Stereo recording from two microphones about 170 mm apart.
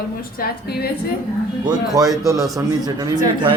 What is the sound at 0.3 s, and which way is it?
Speech, 65° left (ahead or behind).